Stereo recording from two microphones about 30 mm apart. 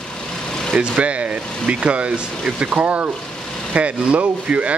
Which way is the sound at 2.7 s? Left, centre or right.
Right.